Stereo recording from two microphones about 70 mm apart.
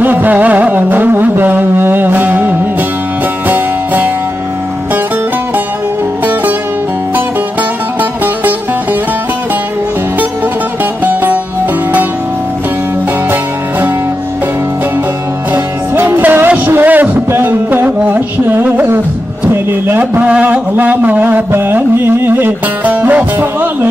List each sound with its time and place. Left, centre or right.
0.0 s music: right
15.5 s music: right
16.2 s a sound: right
20.7 s music: right